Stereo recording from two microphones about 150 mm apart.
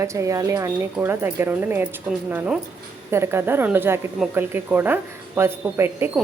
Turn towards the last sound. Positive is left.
turn(degrees=-15)  # may be behind; listen again after turning